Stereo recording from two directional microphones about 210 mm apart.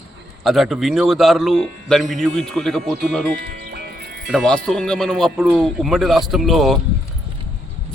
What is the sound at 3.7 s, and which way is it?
Music, 45° right (ahead or behind).